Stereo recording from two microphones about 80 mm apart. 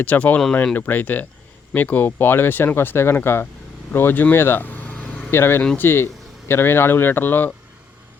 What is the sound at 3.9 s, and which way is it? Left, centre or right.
Vehicle, left.